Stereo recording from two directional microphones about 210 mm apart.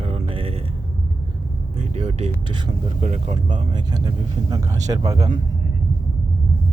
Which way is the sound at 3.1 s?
35° right (ahead or behind).